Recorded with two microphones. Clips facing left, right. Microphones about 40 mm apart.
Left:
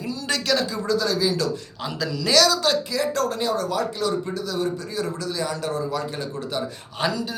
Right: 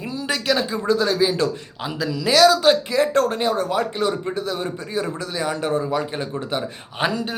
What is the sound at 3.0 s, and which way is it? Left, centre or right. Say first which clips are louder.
A man's voice: right 5 dB; right.